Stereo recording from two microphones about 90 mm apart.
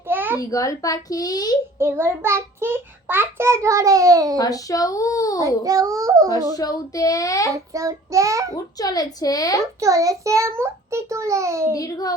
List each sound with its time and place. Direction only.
0.1 s a sound: 20° right (ahead or behind)
0.3 s a child's voice: 40° left (ahead or behind)
1.8 s a child's voice: 30° right (ahead or behind)
4.4 s a child's voice: 40° left (ahead or behind)
5.6 s a child's voice: 40° right (ahead or behind)
6.6 s a child's voice: 40° left (ahead or behind)
7.5 s a child's voice: 35° right (ahead or behind)
8.8 s a woman's voice: 45° left (ahead or behind)
9.8 s a child's voice: 40° right (ahead or behind)
11.7 s a woman's voice: 40° left (ahead or behind)